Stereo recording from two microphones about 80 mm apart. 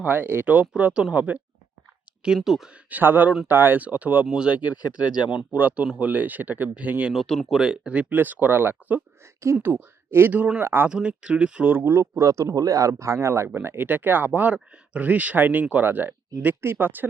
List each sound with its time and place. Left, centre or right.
0.0 s speech: right
2.2 s speech: centre
2.9 s speech: right
7.1 s speech: centre
7.6 s speech: centre; by 10.8 s right
10.8 s speech: centre
11.7 s speech: right